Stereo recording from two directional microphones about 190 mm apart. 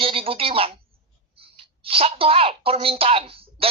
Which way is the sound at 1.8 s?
30° right (ahead or behind).